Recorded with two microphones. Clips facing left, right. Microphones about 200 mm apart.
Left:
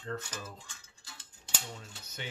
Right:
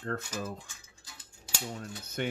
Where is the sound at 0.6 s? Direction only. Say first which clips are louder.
Right 1 dB; 10° right (ahead or behind).